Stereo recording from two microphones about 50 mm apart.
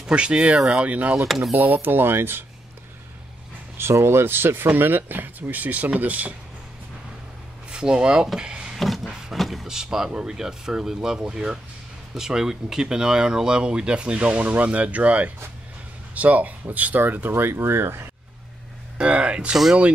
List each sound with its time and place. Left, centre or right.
0.1 s speech: right
1.2 s speech: centre
1.5 s speech: right
3.7 s speech: right
7.7 s speech: centre
8.4 s drawer open or close: centre
8.7 s a sound: centre
9.7 s speech: centre; by 18.0 s right
18.9 s speech: right
19.5 s speech: centre